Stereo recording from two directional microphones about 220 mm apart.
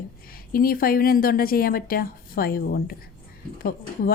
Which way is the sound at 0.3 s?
40° left (ahead or behind).